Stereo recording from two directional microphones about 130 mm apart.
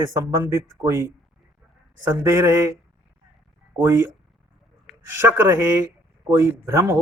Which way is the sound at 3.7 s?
20° right (ahead or behind).